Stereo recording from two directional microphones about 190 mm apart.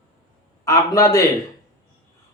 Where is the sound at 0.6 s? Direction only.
15° left (ahead or behind).